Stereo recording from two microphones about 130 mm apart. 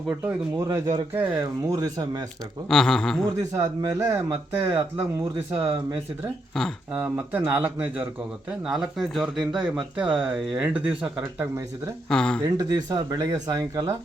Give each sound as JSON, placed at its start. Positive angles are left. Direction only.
{"t": 0.5, "sound": "speech", "side_deg": -25}
{"t": 1.1, "sound": "speech", "side_deg": -15}
{"t": 1.6, "sound": "speech", "side_deg": -30}
{"t": 2.6, "sound": "a sound", "side_deg": 5}
{"t": 3.5, "sound": "speech", "side_deg": -30}
{"t": 6.5, "sound": "a sound", "side_deg": 5}
{"t": 6.9, "sound": "speech", "side_deg": -15}
{"t": 12.0, "sound": "speech", "side_deg": 5}
{"t": 12.5, "sound": "speech", "side_deg": -30}